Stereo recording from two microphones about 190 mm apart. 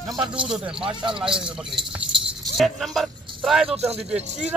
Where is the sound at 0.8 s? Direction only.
25° right (ahead or behind).